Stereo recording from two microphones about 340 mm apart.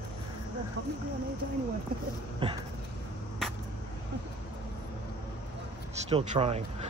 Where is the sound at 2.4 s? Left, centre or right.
Centre.